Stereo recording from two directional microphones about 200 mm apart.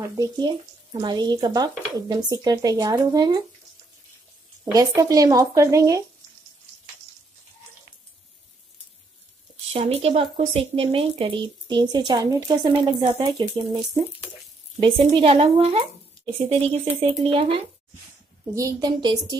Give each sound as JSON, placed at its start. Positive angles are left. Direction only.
{"t": 0.2, "sound": "speech", "side_deg": -20}
{"t": 4.6, "sound": "speech", "side_deg": -15}
{"t": 9.7, "sound": "speech", "side_deg": -30}
{"t": 14.8, "sound": "speech", "side_deg": -25}
{"t": 16.9, "sound": "speech", "side_deg": -30}
{"t": 18.5, "sound": "speech", "side_deg": -15}